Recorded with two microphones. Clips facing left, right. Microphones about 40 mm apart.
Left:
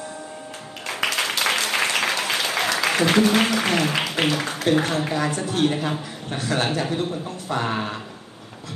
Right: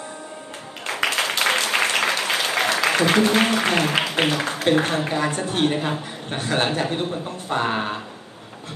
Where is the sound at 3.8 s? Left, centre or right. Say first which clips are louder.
Right 2 dB; right.